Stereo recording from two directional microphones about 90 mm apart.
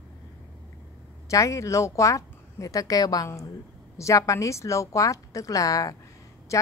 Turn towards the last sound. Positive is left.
turn(degrees=35)  # may be behind; listen again after turning